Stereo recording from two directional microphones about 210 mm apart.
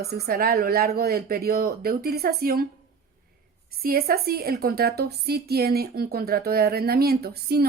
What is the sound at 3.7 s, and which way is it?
Speech, 45° right (ahead or behind).